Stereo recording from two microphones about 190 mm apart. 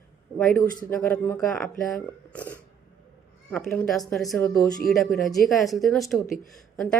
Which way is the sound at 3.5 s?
5° left (ahead or behind).